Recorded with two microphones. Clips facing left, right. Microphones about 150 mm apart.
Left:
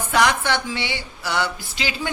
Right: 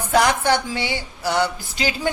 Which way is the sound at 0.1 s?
35° right (ahead or behind).